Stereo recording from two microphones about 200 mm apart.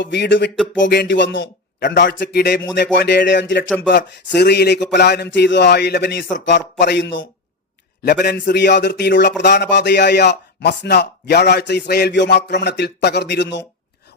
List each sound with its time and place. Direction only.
0.0 s a man's voice: 60° left (ahead or behind)
0.5 s a sound: centre (ahead or behind)
0.8 s a man's voice: 60° left (ahead or behind)
8.0 s a man's voice: 50° left (ahead or behind)